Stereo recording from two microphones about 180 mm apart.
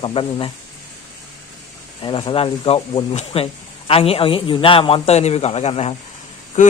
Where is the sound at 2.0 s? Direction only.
25° left (ahead or behind).